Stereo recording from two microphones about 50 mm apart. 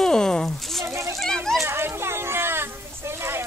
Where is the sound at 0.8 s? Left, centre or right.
Right.